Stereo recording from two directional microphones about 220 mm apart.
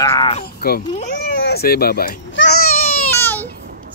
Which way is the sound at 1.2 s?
45° left (ahead or behind).